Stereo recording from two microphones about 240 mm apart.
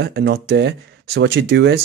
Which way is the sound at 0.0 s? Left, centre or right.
Right.